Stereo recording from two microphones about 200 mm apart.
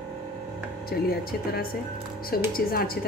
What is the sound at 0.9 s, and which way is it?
A woman's voice, 50° left (ahead or behind).